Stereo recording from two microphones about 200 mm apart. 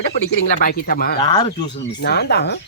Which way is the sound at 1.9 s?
55° left (ahead or behind).